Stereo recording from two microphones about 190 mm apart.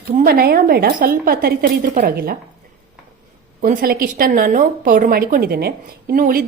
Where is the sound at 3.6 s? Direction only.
50° right (ahead or behind).